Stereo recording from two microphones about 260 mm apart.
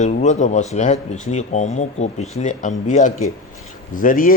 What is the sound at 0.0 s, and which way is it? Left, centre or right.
A man's voice, left.